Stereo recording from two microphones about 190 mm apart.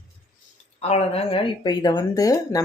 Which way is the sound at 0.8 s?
35° left (ahead or behind).